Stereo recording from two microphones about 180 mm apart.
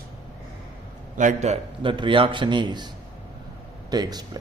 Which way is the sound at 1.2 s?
40° right (ahead or behind).